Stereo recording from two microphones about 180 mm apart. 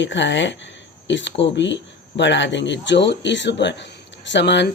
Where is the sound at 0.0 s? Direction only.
85° left.